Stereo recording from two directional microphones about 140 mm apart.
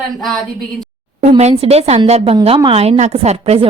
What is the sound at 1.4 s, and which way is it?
Speech, 50° right (ahead or behind).